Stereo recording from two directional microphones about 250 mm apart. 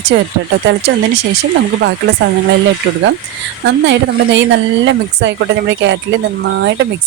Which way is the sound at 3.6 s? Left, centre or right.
Right.